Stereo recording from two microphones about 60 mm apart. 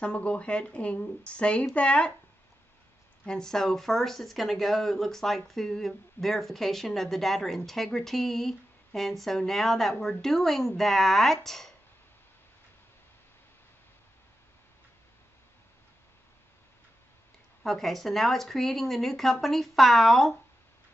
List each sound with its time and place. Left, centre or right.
0.0 s speech: centre
3.3 s speech: centre
17.6 s speech: centre